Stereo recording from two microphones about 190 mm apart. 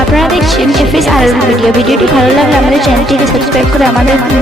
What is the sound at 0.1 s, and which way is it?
Speech, centre (ahead or behind).